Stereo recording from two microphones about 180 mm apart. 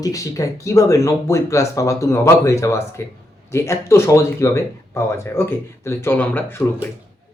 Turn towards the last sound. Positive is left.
turn(degrees=10)  # may be behind; listen again after turning